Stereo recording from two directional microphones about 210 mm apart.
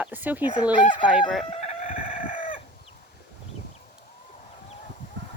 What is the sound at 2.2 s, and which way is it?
Chicken, 40° left (ahead or behind).